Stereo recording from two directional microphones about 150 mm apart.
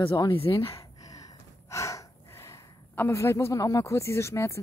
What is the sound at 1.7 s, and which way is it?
Speech, 20° left (ahead or behind).